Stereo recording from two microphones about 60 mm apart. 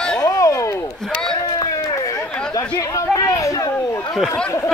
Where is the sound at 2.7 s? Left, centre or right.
Left.